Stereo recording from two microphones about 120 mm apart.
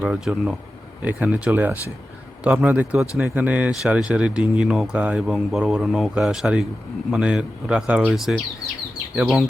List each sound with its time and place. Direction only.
0.0 s speech: 5° right (ahead or behind)